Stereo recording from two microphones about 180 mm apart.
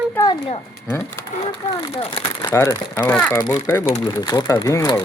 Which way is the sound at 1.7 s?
25° left (ahead or behind).